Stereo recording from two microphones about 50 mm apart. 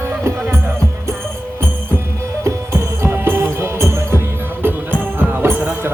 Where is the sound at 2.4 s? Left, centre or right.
Right.